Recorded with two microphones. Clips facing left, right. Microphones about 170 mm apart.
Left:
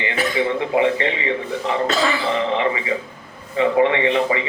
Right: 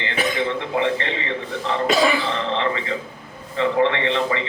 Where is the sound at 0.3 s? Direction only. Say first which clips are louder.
Left 7 dB; 15° left (ahead or behind).